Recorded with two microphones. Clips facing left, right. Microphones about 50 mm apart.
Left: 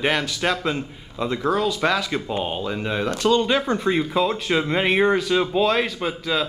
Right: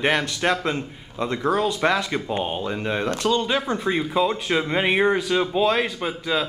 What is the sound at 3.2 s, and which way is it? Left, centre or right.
A man's voice, centre.